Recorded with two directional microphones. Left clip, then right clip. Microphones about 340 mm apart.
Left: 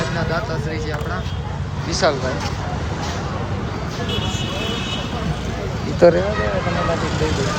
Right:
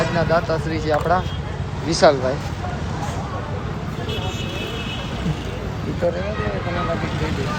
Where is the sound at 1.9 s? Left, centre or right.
Centre.